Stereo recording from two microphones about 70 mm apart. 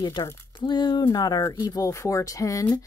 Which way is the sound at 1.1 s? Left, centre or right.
Left.